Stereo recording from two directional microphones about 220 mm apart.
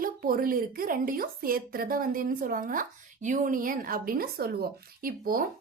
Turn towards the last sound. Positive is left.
turn(degrees=-40)  # may be behind; listen again after turning